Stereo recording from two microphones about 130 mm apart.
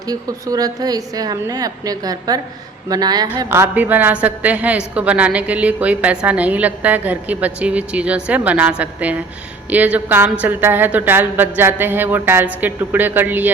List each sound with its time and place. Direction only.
0.1 s a woman's voice: 30° right (ahead or behind)
3.5 s a woman's voice: 15° right (ahead or behind)